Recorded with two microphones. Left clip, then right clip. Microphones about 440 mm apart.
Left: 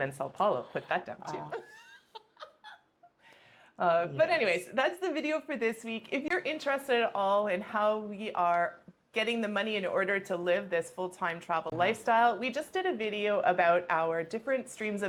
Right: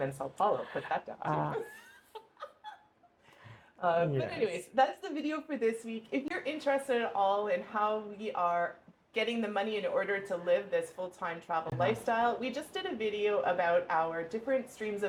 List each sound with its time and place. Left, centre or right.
0.0 s a woman's voice: left
3.8 s a woman's voice: left